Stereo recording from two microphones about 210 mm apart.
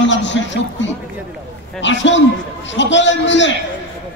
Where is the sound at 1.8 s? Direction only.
60° left (ahead or behind).